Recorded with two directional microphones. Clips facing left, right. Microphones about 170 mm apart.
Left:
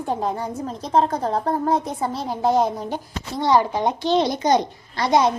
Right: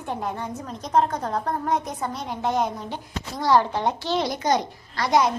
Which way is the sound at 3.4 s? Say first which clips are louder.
Left 2 dB; 15° left (ahead or behind).